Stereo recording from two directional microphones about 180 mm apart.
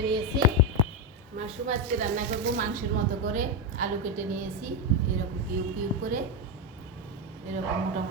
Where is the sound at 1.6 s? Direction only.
45° right (ahead or behind).